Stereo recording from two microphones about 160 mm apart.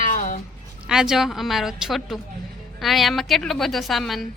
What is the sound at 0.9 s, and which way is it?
A woman's voice, centre (ahead or behind).